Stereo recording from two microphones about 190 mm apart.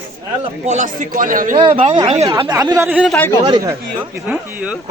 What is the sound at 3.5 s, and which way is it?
Speech, 20° right (ahead or behind).